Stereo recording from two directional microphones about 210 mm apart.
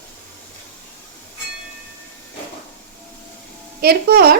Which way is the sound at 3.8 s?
50° right (ahead or behind).